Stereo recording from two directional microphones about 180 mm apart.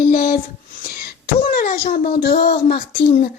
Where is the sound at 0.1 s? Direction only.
55° left (ahead or behind).